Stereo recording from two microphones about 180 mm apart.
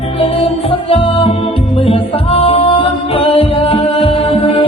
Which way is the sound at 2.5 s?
30° left (ahead or behind).